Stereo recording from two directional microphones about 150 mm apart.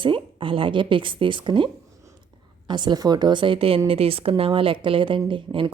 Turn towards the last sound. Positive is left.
turn(degrees=-35)  # may be behind; listen again after turning